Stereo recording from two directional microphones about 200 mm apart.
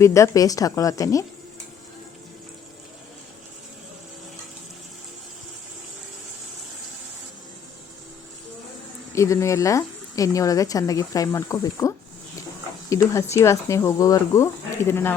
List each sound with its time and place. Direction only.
0.0 s speech: 15° left (ahead or behind)
9.1 s speech: 15° left (ahead or behind)